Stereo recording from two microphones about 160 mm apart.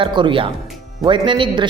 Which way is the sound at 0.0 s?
30° right (ahead or behind).